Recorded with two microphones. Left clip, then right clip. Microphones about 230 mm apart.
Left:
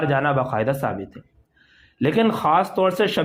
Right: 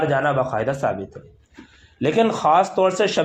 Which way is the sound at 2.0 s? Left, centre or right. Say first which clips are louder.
Right 1 dB; left.